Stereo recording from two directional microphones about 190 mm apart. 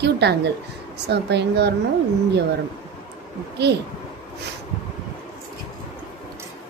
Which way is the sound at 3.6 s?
60° right (ahead or behind).